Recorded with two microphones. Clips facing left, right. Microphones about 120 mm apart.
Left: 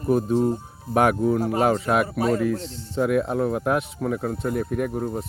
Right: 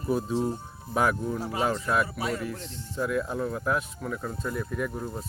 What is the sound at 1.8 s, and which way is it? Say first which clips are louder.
Speech: left 5 dB; 70° left (ahead or behind).